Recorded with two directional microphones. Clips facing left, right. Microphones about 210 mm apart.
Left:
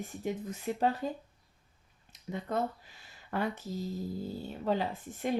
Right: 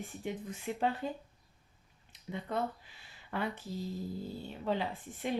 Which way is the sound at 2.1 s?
45° left (ahead or behind).